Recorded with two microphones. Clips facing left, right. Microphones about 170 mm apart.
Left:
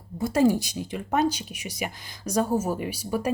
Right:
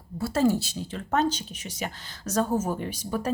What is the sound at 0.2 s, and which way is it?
Speech, 15° left (ahead or behind).